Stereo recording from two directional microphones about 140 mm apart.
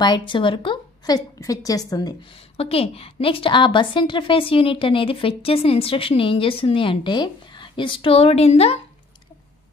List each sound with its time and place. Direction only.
0.0 s a woman's voice: 35° left (ahead or behind)
2.5 s a woman's voice: 45° left (ahead or behind)